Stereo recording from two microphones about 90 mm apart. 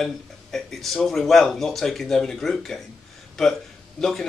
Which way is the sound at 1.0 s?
Centre (ahead or behind).